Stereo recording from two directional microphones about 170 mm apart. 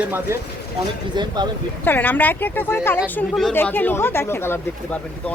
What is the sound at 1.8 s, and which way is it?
Speech, 10° left (ahead or behind).